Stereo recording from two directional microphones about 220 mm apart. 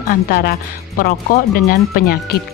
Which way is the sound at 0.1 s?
45° left (ahead or behind).